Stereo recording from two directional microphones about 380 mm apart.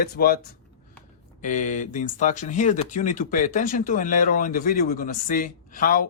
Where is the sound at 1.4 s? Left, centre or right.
Centre.